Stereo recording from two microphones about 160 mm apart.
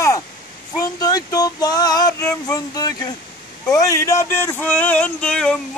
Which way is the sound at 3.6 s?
20° left (ahead or behind).